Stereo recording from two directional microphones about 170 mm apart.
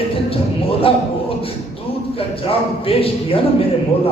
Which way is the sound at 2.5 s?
35° left (ahead or behind).